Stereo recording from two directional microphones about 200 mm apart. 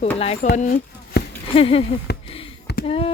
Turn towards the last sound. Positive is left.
turn(degrees=30)  # may be behind; listen again after turning